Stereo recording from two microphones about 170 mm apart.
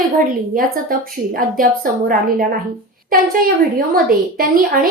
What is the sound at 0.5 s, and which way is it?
A woman's voice, 55° right (ahead or behind).